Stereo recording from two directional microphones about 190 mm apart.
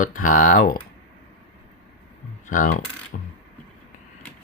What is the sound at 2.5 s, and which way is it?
Speech, 45° left (ahead or behind).